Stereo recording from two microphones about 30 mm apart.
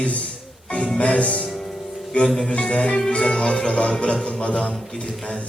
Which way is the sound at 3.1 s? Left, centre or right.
Left.